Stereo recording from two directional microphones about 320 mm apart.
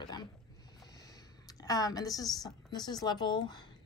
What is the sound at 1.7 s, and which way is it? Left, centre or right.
Speech, centre.